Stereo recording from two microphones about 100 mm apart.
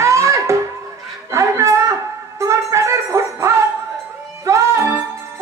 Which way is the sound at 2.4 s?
30° right (ahead or behind).